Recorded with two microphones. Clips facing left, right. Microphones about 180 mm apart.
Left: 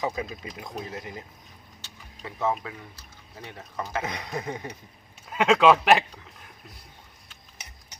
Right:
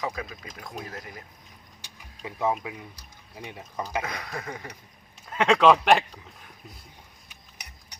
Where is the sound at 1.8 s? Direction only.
15° right (ahead or behind).